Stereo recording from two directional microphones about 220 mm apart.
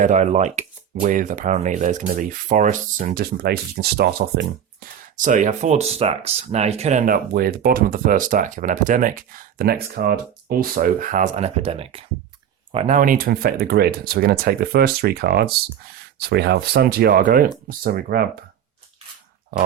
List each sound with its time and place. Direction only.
0.0 s speech: 35° right (ahead or behind)